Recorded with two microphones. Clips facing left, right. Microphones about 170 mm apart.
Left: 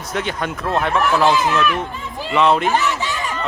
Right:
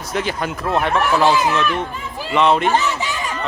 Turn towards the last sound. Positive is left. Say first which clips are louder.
# even
turn(degrees=-20)  # may be behind; listen again after turning